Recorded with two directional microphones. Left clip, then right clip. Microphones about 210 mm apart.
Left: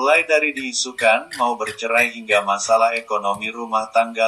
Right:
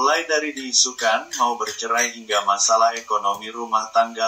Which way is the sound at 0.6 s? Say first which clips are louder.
Right 5 dB; 30° left (ahead or behind).